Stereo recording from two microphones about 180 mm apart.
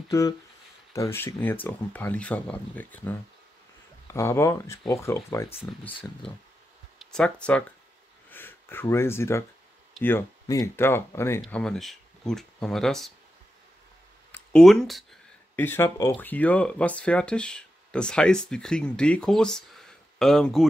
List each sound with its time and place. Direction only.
0.9 s speech: 15° left (ahead or behind)
5.9 s speech: 30° left (ahead or behind)
7.1 s speech: 5° left (ahead or behind)
11.4 s speech: 5° left (ahead or behind)
14.3 s speech: 5° left (ahead or behind)
15.5 s speech: 10° left (ahead or behind)